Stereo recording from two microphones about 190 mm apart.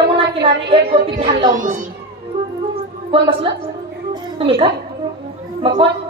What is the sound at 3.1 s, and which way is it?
A woman's voice, 25° right (ahead or behind).